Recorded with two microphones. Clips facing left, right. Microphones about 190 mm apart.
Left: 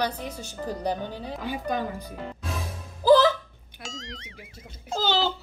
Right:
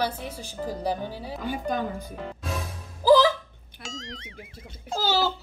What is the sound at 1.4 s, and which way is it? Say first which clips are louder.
Speech: right 1 dB; 45° right (ahead or behind).